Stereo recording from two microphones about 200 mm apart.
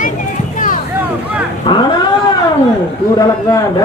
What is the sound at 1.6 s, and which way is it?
Cat, 20° left (ahead or behind).